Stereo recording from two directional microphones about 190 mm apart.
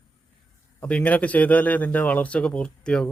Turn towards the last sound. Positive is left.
turn(degrees=5)  # may be behind; listen again after turning